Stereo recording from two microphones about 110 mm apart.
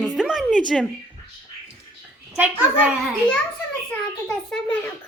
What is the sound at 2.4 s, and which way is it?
A child's voice, 10° right (ahead or behind).